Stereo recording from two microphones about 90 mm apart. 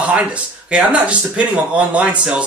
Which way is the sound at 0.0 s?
15° right (ahead or behind).